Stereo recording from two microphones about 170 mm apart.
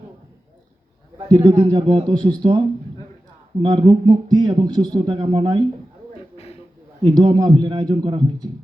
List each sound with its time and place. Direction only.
1.3 s speech: 25° right (ahead or behind)
6.3 s a sound: 35° left (ahead or behind)
7.0 s speech: 30° right (ahead or behind)